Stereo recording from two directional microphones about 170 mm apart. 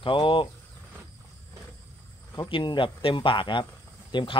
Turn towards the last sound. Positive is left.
turn(degrees=30)  # may be behind; listen again after turning